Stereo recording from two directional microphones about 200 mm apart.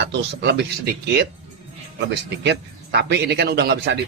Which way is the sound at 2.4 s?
55° right (ahead or behind).